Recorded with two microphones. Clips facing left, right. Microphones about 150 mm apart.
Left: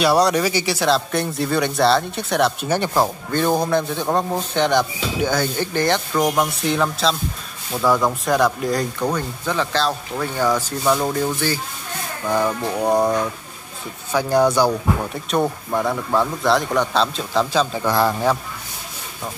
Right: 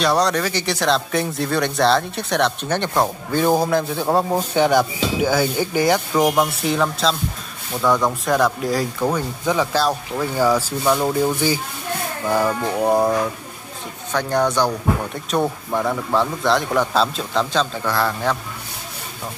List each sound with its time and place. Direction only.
0.0 s speech: 10° left (ahead or behind)
14.1 s a man's voice: 10° left (ahead or behind)